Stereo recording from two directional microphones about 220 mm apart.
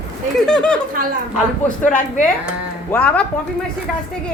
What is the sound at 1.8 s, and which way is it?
Speech, 35° left (ahead or behind).